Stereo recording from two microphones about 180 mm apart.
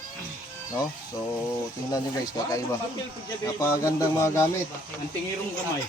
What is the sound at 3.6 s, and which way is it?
Speech, 20° left (ahead or behind).